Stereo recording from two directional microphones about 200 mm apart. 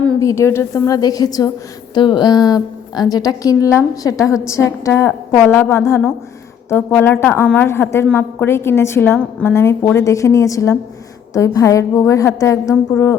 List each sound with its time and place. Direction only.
0.2 s a woman's voice: 15° left (ahead or behind)